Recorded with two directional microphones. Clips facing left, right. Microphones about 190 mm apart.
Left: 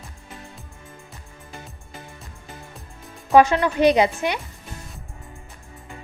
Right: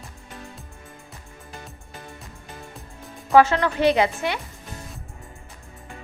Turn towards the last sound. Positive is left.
turn(degrees=20)  # may be behind; listen again after turning